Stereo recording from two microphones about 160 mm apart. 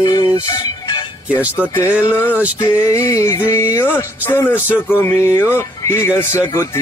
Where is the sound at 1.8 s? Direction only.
15° left (ahead or behind).